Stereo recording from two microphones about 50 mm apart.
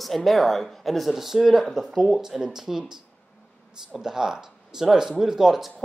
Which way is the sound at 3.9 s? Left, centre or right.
Centre.